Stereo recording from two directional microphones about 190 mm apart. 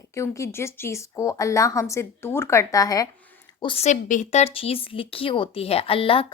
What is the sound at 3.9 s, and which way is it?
Speech, 40° left (ahead or behind).